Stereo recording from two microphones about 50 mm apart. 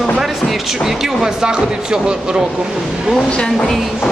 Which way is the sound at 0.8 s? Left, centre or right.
Centre.